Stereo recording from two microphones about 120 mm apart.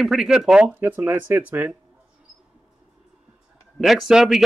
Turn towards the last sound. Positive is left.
turn(degrees=-5)  # may be behind; listen again after turning